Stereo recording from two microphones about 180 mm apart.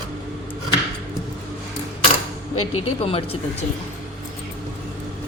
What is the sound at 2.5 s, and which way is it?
Speech, 35° left (ahead or behind).